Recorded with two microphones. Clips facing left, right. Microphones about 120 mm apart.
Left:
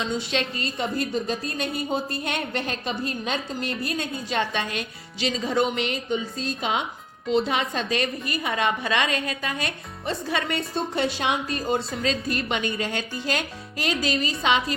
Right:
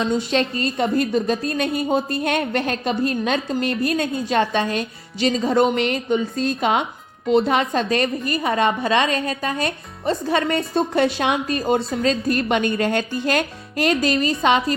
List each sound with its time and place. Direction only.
0.0 s a woman's voice: 45° right (ahead or behind)
4.4 s a woman's voice: 35° right (ahead or behind); by 11.8 s 60° right (ahead or behind)
12.0 s a woman's voice: 45° right (ahead or behind)